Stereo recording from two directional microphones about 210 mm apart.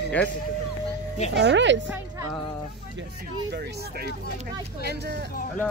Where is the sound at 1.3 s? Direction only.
60° right (ahead or behind).